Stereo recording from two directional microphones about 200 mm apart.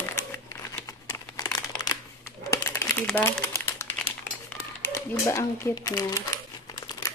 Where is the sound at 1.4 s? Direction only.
15° left (ahead or behind).